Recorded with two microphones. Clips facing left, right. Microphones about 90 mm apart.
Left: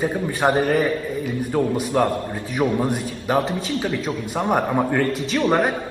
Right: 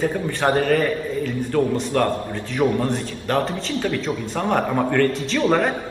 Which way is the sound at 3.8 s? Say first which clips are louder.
Right 1 dB; 20° left (ahead or behind).